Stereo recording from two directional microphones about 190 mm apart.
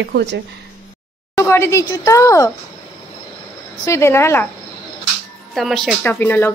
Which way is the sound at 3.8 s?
15° left (ahead or behind).